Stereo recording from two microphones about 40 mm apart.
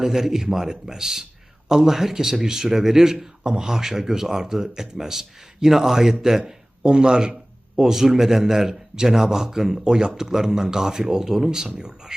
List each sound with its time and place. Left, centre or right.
0.0 s speech: centre
6.8 s a man's voice: right
7.8 s speech: centre